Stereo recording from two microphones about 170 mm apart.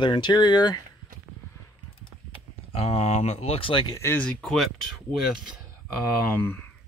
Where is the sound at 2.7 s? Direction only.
35° left (ahead or behind).